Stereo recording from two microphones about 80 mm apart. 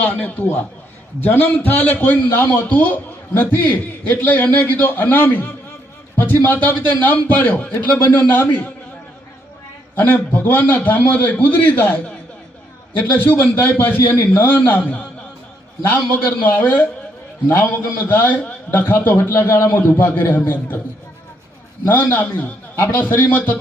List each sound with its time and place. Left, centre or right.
0.0 s a man's voice: centre
9.9 s a man's voice: left
13.0 s a man's voice: left
16.5 s a man's voice: left
21.8 s a man's voice: left